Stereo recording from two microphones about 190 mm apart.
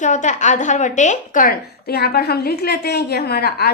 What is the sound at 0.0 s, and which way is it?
A woman's voice, 40° left (ahead or behind).